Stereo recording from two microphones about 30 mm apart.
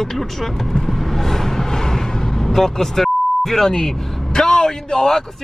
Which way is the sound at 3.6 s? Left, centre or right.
Left.